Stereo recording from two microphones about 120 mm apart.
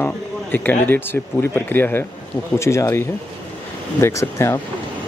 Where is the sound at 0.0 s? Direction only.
15° left (ahead or behind).